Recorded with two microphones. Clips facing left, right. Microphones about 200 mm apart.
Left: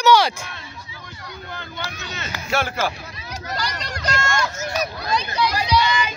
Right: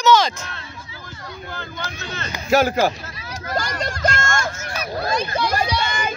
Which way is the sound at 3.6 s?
50° right (ahead or behind).